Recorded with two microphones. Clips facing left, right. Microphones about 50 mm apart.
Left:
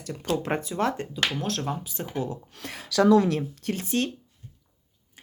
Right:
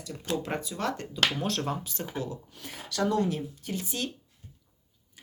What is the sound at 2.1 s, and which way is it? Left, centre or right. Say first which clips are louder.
Speech: left 5 dB; left.